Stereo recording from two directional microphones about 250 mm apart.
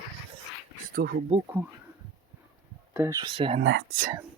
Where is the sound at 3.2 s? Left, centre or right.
Right.